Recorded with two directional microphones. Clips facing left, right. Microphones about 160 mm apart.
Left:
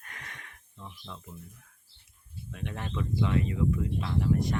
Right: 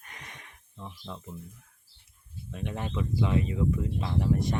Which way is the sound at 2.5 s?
20° right (ahead or behind).